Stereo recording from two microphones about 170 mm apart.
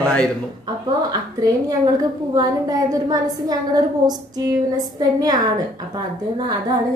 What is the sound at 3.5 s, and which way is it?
A woman's voice, 25° right (ahead or behind).